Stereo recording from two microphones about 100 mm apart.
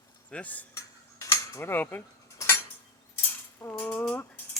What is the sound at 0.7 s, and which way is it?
Cutlery, 30° left (ahead or behind).